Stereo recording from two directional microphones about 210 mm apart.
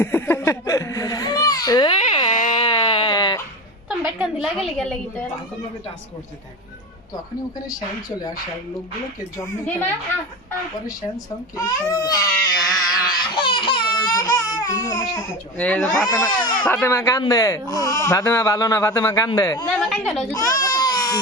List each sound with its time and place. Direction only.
0.0 s a sound: 10° left (ahead or behind)
2.3 s a sound: 35° left (ahead or behind)
3.8 s a woman's voice: 5° right (ahead or behind)
9.4 s speech: 10° left (ahead or behind)
11.5 s speech: 15° left (ahead or behind)
12.9 s baby cry: 20° left (ahead or behind)
16.6 s speech: 10° left (ahead or behind)
19.6 s a woman's voice: 5° left (ahead or behind)
20.3 s baby cry: 15° left (ahead or behind)